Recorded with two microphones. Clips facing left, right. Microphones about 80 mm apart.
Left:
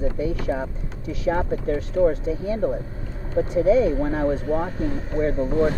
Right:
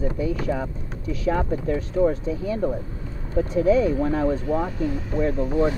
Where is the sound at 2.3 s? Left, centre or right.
Left.